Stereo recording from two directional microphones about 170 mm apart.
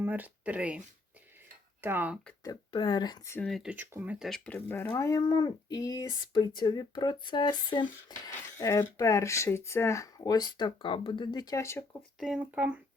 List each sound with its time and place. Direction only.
0.0 s speech: 10° right (ahead or behind)
1.8 s speech: 10° right (ahead or behind)
2.4 s speech: 25° left (ahead or behind)
3.3 s speech: 5° left (ahead or behind)
4.3 s speech: 10° left (ahead or behind)
12.2 s speech: 5° right (ahead or behind)